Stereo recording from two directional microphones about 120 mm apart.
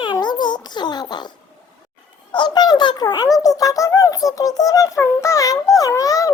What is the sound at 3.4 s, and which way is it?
A child's voice, 30° left (ahead or behind).